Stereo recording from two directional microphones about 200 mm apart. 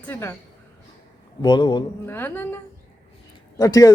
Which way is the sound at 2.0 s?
10° left (ahead or behind).